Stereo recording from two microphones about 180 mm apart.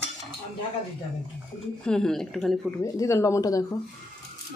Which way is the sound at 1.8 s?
5° left (ahead or behind).